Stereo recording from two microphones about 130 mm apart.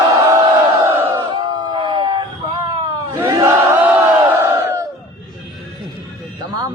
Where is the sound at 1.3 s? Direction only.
35° right (ahead or behind).